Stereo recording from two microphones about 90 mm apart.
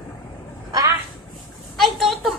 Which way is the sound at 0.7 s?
40° right (ahead or behind).